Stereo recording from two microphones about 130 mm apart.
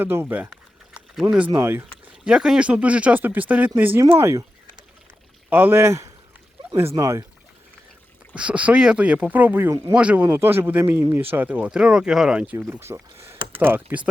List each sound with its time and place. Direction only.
0.0 s speech: 15° right (ahead or behind)
2.2 s speech: 5° right (ahead or behind)
5.5 s speech: 15° right (ahead or behind)
8.4 s speech: 10° right (ahead or behind)